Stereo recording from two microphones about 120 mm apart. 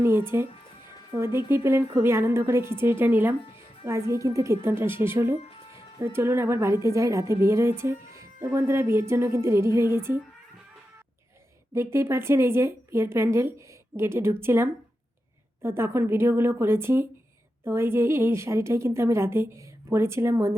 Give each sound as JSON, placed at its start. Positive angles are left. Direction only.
{"t": 0.0, "sound": "a woman's voice", "side_deg": -20}
{"t": 5.4, "sound": "music", "side_deg": 50}
{"t": 6.0, "sound": "a woman's voice", "side_deg": -20}
{"t": 11.7, "sound": "a woman's voice", "side_deg": -20}